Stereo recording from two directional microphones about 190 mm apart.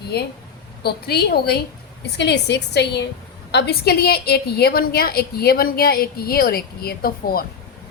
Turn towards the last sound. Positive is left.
turn(degrees=50)  # may be behind; listen again after turning